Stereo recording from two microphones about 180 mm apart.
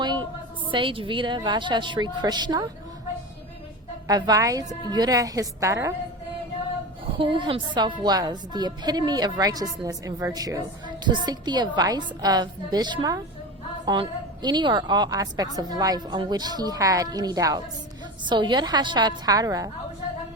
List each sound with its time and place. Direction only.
0.0 s a sound: 25° right (ahead or behind)
0.7 s a woman's voice: 30° right (ahead or behind)
4.0 s a woman's voice: 20° right (ahead or behind)
7.2 s a woman's voice: 25° right (ahead or behind)